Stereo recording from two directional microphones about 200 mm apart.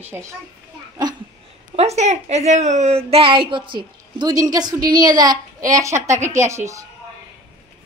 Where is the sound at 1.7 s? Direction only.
35° right (ahead or behind); by 6.8 s 15° right (ahead or behind).